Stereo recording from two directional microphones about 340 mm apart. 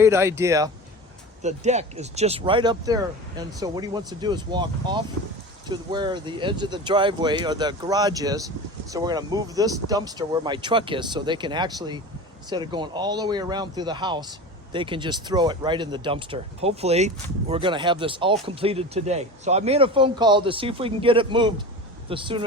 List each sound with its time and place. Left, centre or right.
0.0 s speech: centre
1.4 s speech: centre